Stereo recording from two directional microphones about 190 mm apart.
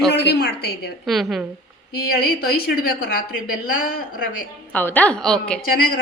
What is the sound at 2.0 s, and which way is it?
A woman's voice, 55° left (ahead or behind).